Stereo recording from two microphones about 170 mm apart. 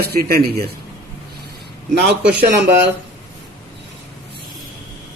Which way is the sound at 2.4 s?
90° right.